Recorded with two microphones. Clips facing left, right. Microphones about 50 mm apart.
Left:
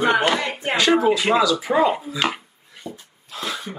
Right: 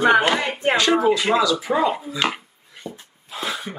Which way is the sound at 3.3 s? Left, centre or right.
Centre.